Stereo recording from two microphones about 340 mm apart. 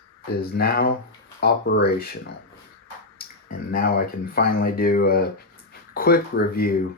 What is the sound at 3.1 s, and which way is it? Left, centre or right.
Speech, left.